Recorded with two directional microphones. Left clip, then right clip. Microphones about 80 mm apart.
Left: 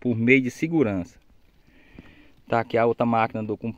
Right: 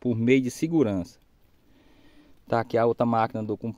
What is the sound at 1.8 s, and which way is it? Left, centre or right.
Speech, centre.